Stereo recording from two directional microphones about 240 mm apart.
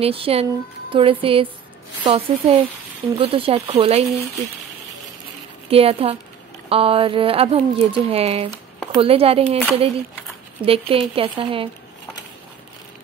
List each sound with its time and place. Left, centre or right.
0.0 s speech: right
5.7 s speech: right
10.6 s speech: right